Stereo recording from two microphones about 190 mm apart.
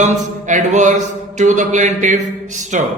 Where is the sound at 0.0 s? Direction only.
40° right (ahead or behind).